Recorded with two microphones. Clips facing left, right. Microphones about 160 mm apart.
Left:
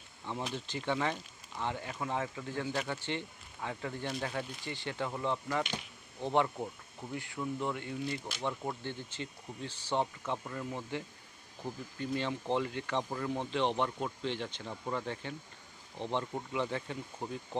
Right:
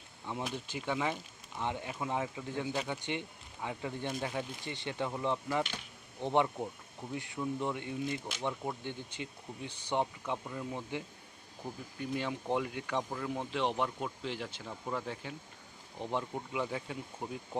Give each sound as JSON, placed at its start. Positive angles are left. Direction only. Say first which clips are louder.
{"t": 0.3, "sound": "speech", "louder": "even", "side_deg": -10}
{"t": 1.6, "sound": "speech", "louder": "even", "side_deg": -20}
{"t": 8.4, "sound": "speech", "louder": "even", "side_deg": -10}